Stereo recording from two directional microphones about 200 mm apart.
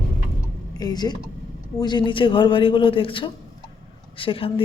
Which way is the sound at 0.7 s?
20° left (ahead or behind).